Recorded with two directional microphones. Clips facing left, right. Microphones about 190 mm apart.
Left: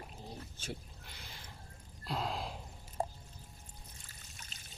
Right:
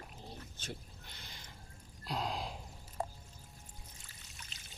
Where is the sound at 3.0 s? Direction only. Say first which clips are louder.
Left 3 dB; 35° left (ahead or behind).